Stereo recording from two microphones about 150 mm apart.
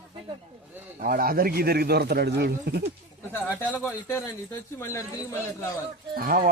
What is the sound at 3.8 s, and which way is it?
Speech, 15° left (ahead or behind).